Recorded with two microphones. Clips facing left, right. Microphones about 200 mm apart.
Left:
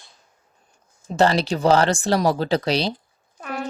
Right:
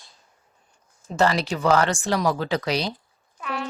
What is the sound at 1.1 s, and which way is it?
Speech, 30° left (ahead or behind).